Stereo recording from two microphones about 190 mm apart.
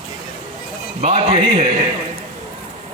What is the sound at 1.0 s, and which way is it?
Speech, 35° right (ahead or behind).